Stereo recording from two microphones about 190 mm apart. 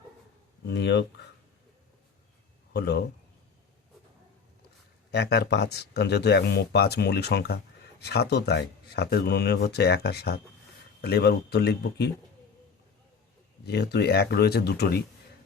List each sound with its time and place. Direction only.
0.7 s speech: 65° left (ahead or behind)
2.7 s speech: 60° left (ahead or behind)
5.1 s speech: 60° left (ahead or behind)
13.7 s speech: 60° left (ahead or behind)